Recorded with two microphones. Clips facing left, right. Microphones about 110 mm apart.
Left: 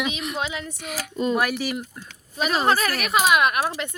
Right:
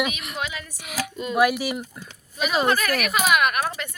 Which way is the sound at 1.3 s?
5° right (ahead or behind).